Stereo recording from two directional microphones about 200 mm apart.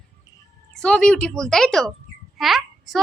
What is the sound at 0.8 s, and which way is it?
A woman's voice, 5° left (ahead or behind).